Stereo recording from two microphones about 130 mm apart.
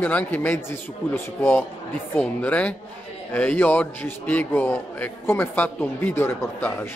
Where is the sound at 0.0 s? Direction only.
15° left (ahead or behind).